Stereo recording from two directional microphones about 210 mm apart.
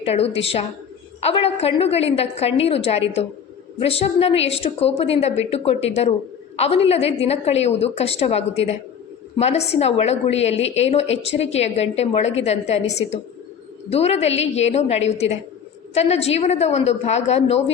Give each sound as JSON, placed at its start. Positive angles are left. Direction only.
{"t": 0.0, "sound": "a woman's voice", "side_deg": 30}